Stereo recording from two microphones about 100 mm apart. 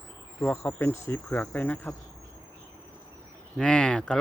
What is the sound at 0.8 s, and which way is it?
Speech, 25° left (ahead or behind).